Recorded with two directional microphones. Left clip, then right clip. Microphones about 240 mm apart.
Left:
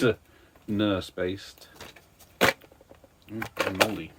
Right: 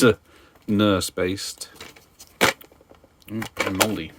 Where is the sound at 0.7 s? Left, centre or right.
Right.